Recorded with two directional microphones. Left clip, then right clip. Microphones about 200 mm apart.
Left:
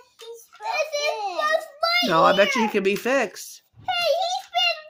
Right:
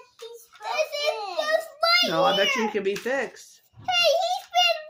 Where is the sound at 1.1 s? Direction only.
10° left (ahead or behind).